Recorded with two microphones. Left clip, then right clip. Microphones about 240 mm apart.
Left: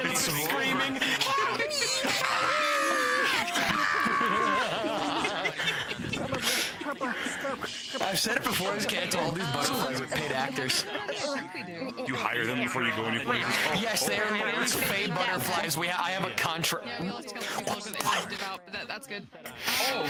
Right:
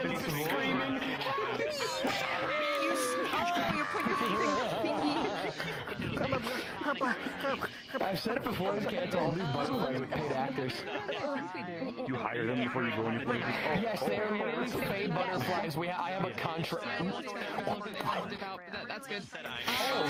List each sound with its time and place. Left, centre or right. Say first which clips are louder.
0.4 s a sound: left 1 dB; left
0.8 s music: left 6 dB; left
1.7 s music: left 5 dB; left
4.2 s a sound: left 5 dB; left
6.4 s a sound: left 8 dB; left
7.0 s speech: left 2 dB; centre
8.0 s a man's voice: left 5 dB; left
9.5 s music: left 4 dB; left
12.2 s music: left 5 dB; left
13.7 s a man's voice: left 4 dB; left
19.6 s music: left 4 dB; left